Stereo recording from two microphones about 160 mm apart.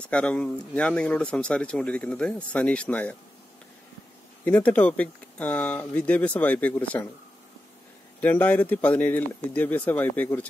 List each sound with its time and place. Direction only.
0.1 s speech: 5° left (ahead or behind)
4.5 s speech: 10° left (ahead or behind)
8.2 s speech: 10° left (ahead or behind)